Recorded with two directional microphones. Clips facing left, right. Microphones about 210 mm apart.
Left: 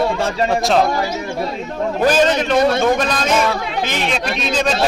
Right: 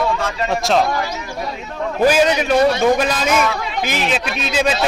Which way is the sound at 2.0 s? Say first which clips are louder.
Right 1 dB; 10° right (ahead or behind).